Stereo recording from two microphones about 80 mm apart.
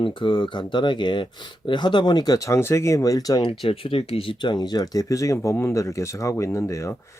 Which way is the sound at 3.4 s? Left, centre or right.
Left.